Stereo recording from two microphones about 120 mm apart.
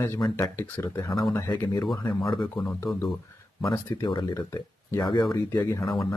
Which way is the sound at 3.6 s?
35° left (ahead or behind).